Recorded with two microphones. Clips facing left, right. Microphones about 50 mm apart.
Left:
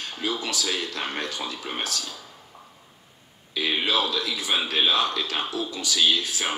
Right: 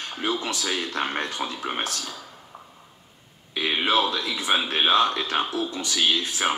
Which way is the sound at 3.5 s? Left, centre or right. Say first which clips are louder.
Right 2 dB; right.